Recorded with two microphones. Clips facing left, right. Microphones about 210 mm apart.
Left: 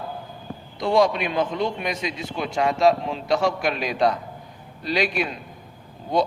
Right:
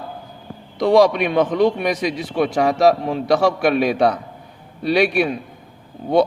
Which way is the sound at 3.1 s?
70° right (ahead or behind).